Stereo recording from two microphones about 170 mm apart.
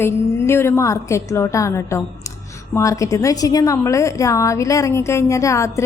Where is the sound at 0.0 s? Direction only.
15° left (ahead or behind).